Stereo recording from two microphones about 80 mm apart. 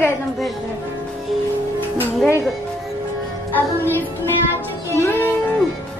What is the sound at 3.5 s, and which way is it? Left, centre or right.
Music, left.